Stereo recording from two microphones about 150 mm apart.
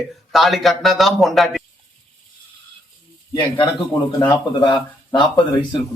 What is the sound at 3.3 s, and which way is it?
Speech, 30° left (ahead or behind).